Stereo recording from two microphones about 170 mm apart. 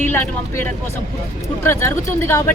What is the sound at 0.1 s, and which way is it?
Speech, 10° left (ahead or behind).